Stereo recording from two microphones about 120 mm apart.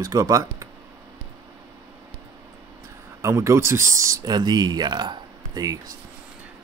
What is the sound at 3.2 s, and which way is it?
Speech, 25° right (ahead or behind).